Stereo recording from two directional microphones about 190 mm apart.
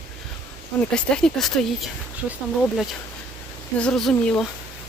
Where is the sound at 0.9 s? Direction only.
5° left (ahead or behind).